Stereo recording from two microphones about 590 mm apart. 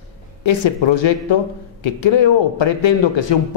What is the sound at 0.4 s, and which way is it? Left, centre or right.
Speech, left.